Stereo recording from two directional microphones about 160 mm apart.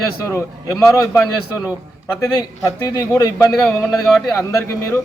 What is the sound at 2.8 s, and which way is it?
Speech, 25° left (ahead or behind).